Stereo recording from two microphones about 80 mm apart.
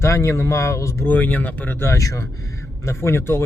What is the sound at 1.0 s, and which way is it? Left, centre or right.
Speech, left.